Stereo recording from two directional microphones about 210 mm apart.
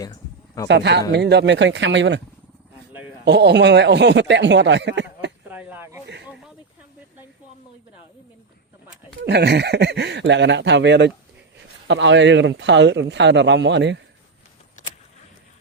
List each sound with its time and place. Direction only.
0.0 s a sound: 15° left (ahead or behind)
0.7 s speech: 55° right (ahead or behind)
3.2 s speech: 55° right (ahead or behind)
5.5 s a sound: 10° right (ahead or behind)
6.2 s speech: 5° right (ahead or behind)
9.2 s speech: 50° right (ahead or behind)
14.8 s vehicle: 35° left (ahead or behind)